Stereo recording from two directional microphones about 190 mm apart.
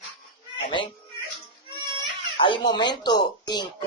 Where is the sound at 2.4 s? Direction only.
25° left (ahead or behind).